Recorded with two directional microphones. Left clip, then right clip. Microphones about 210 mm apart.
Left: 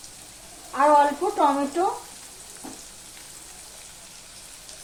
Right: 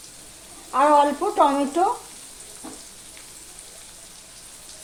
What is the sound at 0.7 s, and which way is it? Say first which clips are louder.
Speech: right 1 dB; 45° right (ahead or behind).